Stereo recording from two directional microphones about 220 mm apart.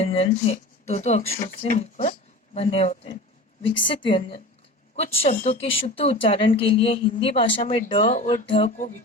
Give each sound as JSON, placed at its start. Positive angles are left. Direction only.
{"t": 0.0, "sound": "speech", "side_deg": 25}
{"t": 8.0, "sound": "speech", "side_deg": 35}
{"t": 8.4, "sound": "speech", "side_deg": 25}